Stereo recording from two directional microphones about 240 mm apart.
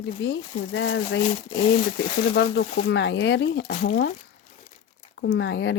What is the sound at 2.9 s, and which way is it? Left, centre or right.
Speech, left.